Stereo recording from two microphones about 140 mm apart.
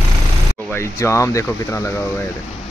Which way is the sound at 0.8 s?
20° left (ahead or behind).